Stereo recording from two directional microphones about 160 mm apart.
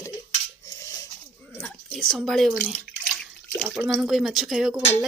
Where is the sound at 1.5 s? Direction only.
5° left (ahead or behind).